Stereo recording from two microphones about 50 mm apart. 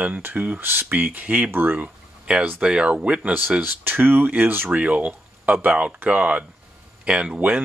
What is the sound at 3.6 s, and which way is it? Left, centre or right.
Speech, right.